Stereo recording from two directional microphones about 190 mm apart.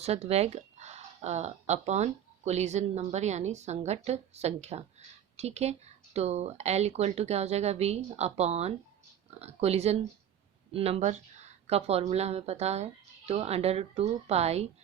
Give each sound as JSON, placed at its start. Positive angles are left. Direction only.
{"t": 0.0, "sound": "speech", "side_deg": -35}